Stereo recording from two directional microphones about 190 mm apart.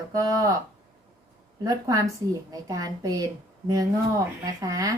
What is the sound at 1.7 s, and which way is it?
A woman's voice, 15° right (ahead or behind).